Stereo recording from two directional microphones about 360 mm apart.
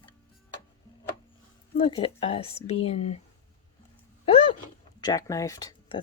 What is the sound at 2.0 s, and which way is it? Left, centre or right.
Speech, centre.